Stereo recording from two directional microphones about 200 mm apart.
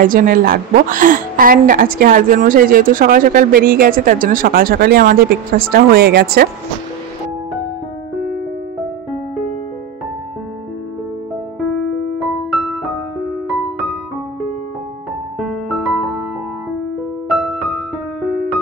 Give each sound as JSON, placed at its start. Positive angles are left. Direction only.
{"t": 0.0, "sound": "a woman's voice", "side_deg": -45}
{"t": 11.7, "sound": "music", "side_deg": 0}
{"t": 15.7, "sound": "music", "side_deg": 0}
{"t": 17.3, "sound": "music", "side_deg": 0}